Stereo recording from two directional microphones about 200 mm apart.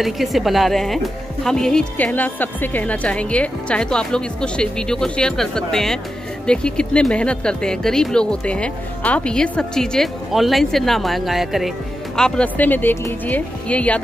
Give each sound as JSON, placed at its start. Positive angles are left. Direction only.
{"t": 0.0, "sound": "speech", "side_deg": 0}